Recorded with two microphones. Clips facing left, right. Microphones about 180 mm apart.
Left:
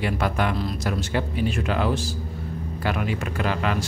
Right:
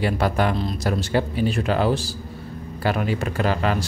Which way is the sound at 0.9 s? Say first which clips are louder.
Right 5 dB; 35° right (ahead or behind).